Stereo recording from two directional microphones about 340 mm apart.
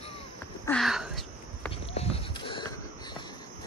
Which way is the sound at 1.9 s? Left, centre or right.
Centre.